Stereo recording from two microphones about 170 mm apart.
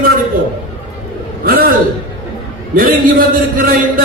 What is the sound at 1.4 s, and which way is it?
A man's voice, 60° right (ahead or behind).